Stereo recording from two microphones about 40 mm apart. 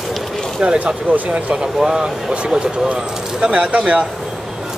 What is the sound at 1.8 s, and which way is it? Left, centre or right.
Speech, centre.